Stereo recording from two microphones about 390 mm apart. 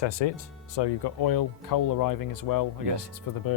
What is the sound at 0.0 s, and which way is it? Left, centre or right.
Speech, left.